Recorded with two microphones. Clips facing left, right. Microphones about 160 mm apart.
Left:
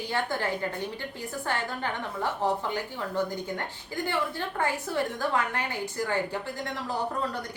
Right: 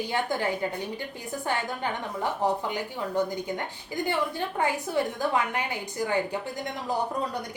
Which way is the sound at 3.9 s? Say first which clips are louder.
Right 2 dB; 15° right (ahead or behind).